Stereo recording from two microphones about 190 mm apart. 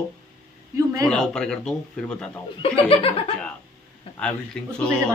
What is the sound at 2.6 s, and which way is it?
Speech, 30° left (ahead or behind).